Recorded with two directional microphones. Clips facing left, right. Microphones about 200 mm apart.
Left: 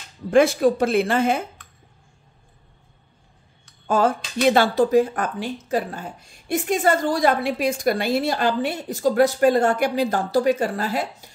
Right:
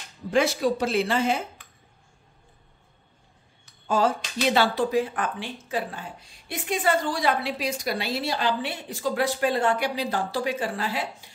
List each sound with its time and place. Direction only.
0.3 s speech: 55° left (ahead or behind)
3.8 s speech: 55° left (ahead or behind)